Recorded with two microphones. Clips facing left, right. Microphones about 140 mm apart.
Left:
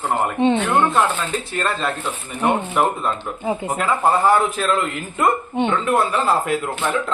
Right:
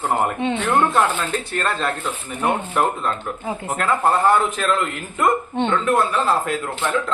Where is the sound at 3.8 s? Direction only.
5° left (ahead or behind).